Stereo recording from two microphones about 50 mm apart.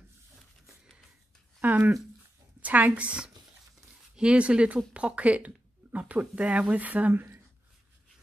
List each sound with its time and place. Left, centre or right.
1.6 s speech: right
2.6 s a woman's voice: right